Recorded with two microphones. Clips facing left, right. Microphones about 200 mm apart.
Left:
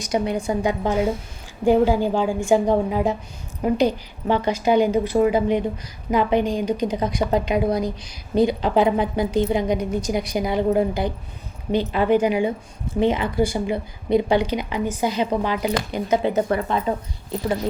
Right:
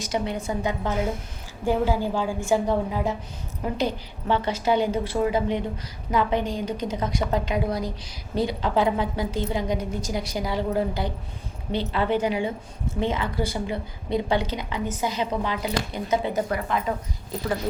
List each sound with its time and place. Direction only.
0.0 s a woman's voice: 15° left (ahead or behind); by 16.9 s 30° left (ahead or behind)